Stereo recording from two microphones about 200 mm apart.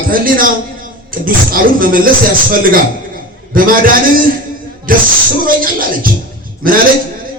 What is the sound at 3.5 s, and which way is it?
Speech, 45° right (ahead or behind).